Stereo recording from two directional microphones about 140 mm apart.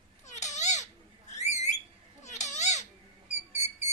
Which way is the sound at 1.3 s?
55° left (ahead or behind).